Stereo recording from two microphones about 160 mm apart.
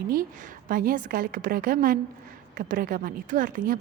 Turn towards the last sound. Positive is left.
turn(degrees=-55)  # may be behind; listen again after turning